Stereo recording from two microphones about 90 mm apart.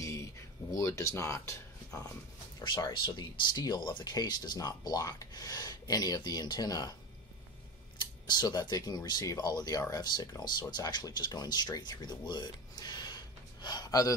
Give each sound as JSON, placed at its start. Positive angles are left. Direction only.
{"t": 0.0, "sound": "a sound", "side_deg": 40}
{"t": 0.7, "sound": "speech", "side_deg": 35}
{"t": 2.9, "sound": "speech", "side_deg": 60}
{"t": 8.0, "sound": "speech", "side_deg": 50}